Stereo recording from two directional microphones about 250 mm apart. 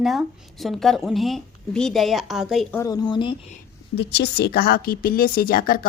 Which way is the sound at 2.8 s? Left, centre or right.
Centre.